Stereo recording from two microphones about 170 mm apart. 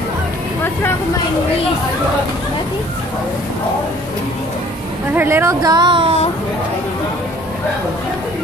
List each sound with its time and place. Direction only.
5.1 s speech: 10° right (ahead or behind); by 6.1 s 30° right (ahead or behind)